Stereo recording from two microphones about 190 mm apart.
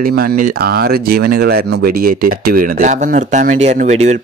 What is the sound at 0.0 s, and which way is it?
Speech, 55° right (ahead or behind).